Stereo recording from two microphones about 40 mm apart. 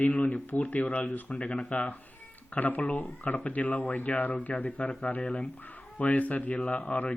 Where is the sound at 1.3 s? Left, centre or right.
Left.